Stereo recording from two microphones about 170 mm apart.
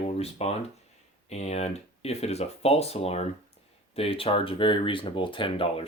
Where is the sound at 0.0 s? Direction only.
35° left (ahead or behind).